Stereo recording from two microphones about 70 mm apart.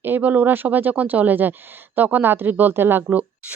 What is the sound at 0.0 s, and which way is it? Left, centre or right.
A woman's voice, right.